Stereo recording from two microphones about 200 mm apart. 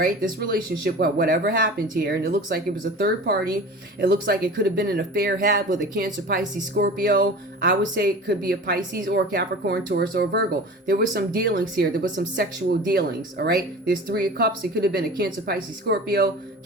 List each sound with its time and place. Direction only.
0.0 s a woman's voice: 45° right (ahead or behind)